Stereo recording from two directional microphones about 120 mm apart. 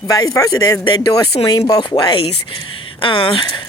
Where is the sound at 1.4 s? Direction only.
50° left (ahead or behind).